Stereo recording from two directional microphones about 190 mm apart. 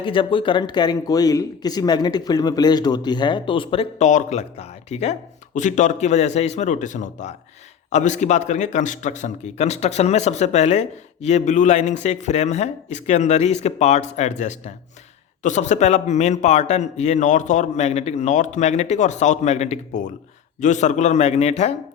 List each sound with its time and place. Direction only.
0.0 s a man's voice: 25° left (ahead or behind)